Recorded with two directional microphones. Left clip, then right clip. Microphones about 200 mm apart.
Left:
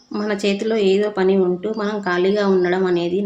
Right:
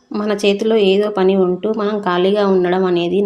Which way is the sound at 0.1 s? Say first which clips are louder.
Right 5 dB; 20° right (ahead or behind).